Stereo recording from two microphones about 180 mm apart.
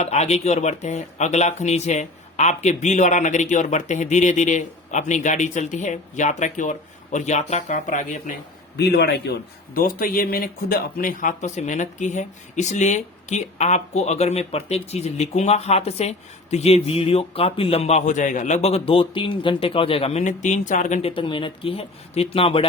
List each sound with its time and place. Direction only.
0.0 s speech: 40° left (ahead or behind)
8.8 s a man's voice: 65° left (ahead or behind)
9.7 s speech: 50° left (ahead or behind)
21.1 s speech: 30° left (ahead or behind)